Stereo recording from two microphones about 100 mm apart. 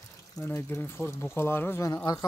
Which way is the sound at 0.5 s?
25° left (ahead or behind).